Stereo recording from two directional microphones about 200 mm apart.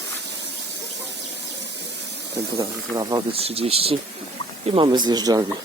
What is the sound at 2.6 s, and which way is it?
Speech, 20° right (ahead or behind).